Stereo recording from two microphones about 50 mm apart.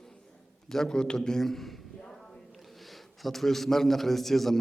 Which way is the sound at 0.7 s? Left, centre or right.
Centre.